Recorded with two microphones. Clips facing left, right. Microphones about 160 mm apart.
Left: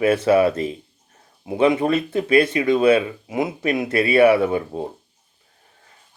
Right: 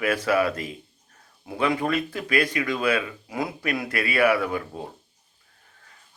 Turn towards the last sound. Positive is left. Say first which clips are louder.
# left 7 dB
turn(degrees=25)  # may be behind; listen again after turning